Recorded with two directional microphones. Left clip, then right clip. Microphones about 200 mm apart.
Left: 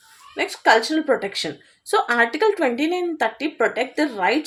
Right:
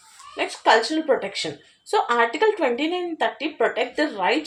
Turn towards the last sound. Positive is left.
turn(degrees=50)  # may be behind; listen again after turning